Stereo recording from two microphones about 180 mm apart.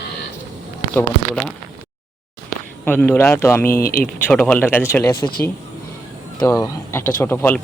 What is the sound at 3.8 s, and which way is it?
Speech, 55° left (ahead or behind).